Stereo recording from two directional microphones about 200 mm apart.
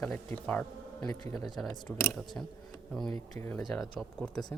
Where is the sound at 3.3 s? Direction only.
10° left (ahead or behind).